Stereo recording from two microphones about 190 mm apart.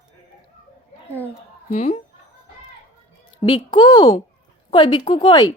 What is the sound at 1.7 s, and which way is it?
Speech, 35° left (ahead or behind).